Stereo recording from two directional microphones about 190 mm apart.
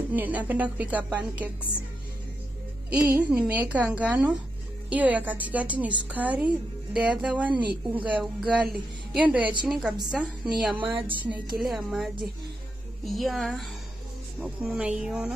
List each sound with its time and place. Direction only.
0.1 s a woman's voice: 10° right (ahead or behind)
2.9 s a woman's voice: 10° right (ahead or behind)
9.4 s a woman's voice: 25° right (ahead or behind)
9.7 s a woman's voice: 5° right (ahead or behind)
11.0 s a woman's voice: 25° right (ahead or behind)
11.2 s speech: 5° right (ahead or behind)